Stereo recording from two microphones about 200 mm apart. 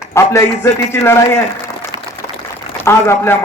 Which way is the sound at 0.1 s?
15° left (ahead or behind).